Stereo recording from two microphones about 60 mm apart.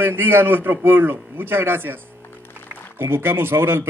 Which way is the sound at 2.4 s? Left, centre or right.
Left.